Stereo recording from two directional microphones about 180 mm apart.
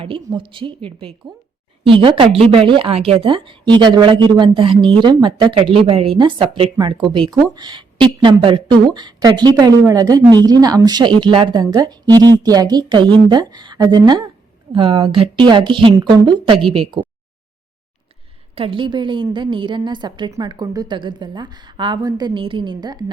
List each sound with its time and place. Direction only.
0.0 s speech: 30° right (ahead or behind)
18.5 s speech: 30° right (ahead or behind)